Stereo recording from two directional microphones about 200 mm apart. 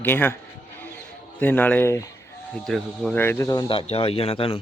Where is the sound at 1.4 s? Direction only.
10° left (ahead or behind).